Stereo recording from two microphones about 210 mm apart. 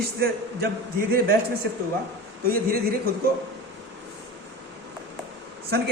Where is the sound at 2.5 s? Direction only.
45° right (ahead or behind).